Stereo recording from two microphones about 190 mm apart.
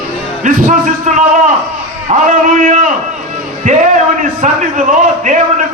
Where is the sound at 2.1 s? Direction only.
35° right (ahead or behind).